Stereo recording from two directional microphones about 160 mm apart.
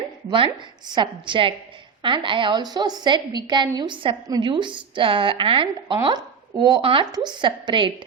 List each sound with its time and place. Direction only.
0.3 s a woman's voice: 30° right (ahead or behind)